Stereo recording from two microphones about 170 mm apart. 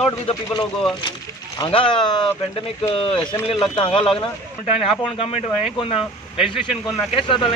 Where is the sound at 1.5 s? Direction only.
30° left (ahead or behind).